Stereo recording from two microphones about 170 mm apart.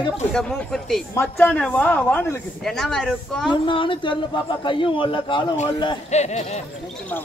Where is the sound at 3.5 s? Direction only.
30° left (ahead or behind).